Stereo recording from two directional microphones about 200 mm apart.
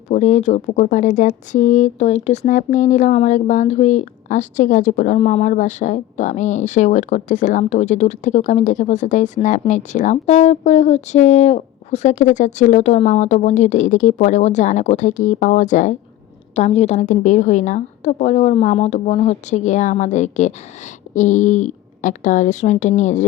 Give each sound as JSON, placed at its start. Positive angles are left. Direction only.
{"t": 0.1, "sound": "speech", "side_deg": 35}